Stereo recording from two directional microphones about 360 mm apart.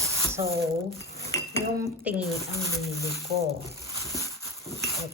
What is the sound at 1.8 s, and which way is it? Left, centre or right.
Speech, centre.